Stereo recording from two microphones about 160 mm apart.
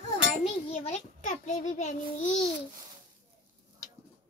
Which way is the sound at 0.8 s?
50° left (ahead or behind).